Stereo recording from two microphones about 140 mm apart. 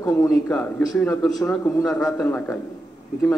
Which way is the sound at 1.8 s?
Centre (ahead or behind).